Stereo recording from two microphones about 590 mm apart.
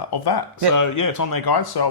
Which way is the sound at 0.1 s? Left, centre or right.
Left.